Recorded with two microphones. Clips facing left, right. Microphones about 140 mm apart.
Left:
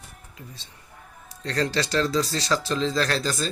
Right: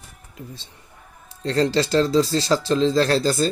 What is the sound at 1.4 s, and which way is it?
Speech, 30° right (ahead or behind).